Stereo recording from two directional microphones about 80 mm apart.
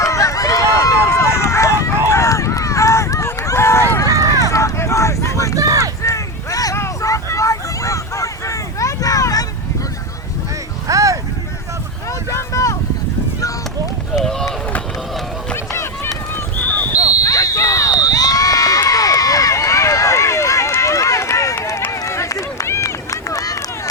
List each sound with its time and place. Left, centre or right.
0.0 s run: left
4.1 s run: right
4.4 s vehicle: left
5.5 s run: right
6.0 s a sound: left
6.7 s vehicle: left
10.8 s a sound: right
12.3 s vehicle: left
14.2 s run: centre
15.5 s run: left
16.6 s a sound: centre
16.9 s a sound: left
17.9 s run: left